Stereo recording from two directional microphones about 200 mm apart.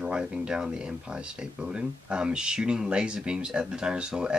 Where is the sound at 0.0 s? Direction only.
5° right (ahead or behind).